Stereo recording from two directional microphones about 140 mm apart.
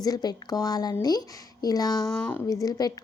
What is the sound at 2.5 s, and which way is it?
Speech, 25° left (ahead or behind).